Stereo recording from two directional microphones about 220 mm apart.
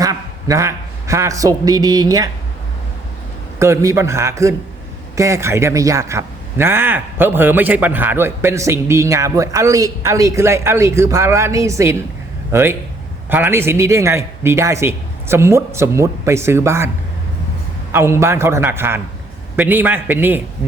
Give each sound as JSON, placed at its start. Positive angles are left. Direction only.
{"t": 0.0, "sound": "a man's voice", "side_deg": -15}
{"t": 3.6, "sound": "speech", "side_deg": -15}
{"t": 17.9, "sound": "speech", "side_deg": -10}